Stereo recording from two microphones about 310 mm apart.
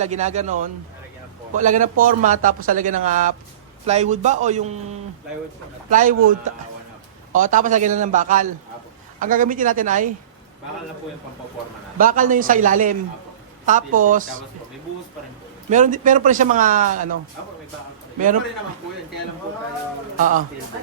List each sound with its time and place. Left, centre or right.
0.0 s a man's voice: right
5.9 s a man's voice: right
11.9 s a man's voice: right
15.7 s a man's voice: right
20.1 s a man's voice: right